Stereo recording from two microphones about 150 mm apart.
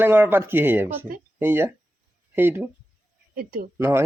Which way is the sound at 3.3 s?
80° right.